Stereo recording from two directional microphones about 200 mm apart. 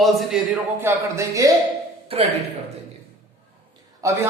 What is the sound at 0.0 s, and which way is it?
A man's voice, centre (ahead or behind).